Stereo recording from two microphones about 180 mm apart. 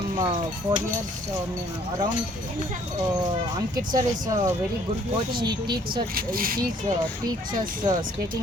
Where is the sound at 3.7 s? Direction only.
20° right (ahead or behind).